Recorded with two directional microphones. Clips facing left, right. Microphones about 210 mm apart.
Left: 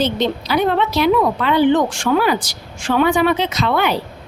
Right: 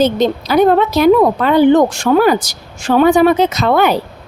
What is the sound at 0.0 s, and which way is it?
A woman's voice, 45° right (ahead or behind).